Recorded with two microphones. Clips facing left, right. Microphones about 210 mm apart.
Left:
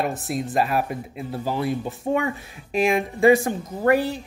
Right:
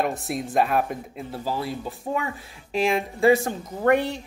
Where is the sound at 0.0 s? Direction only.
Centre (ahead or behind).